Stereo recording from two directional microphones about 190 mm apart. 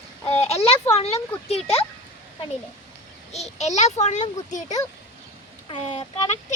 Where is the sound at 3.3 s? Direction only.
35° left (ahead or behind).